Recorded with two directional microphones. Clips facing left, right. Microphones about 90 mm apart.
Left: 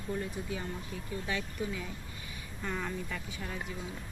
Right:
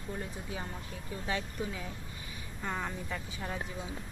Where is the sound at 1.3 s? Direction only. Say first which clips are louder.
Right 1 dB; 30° right (ahead or behind).